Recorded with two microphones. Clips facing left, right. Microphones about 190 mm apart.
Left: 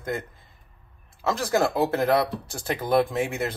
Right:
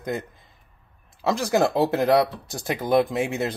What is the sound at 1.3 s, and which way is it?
Speech, 15° right (ahead or behind).